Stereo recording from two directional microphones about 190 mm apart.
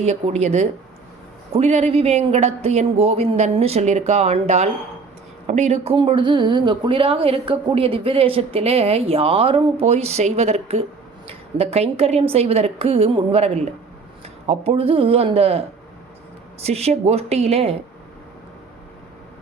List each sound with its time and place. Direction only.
0.0 s speech: 35° right (ahead or behind)
16.6 s speech: 35° right (ahead or behind)